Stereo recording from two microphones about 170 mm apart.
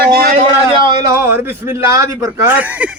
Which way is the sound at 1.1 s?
15° right (ahead or behind).